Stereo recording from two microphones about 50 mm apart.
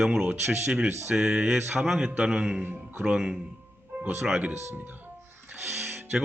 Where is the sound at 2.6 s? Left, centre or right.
Right.